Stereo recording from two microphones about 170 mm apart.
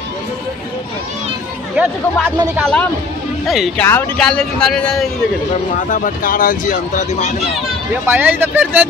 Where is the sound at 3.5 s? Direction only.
Centre (ahead or behind).